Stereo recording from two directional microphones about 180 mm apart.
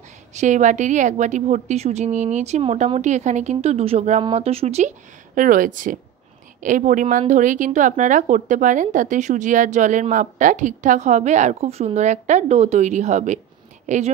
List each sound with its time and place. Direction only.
0.3 s a woman's voice: 40° right (ahead or behind)